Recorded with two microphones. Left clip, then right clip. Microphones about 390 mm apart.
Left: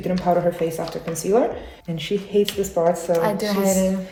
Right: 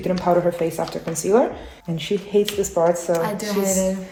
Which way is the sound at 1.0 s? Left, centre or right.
Centre.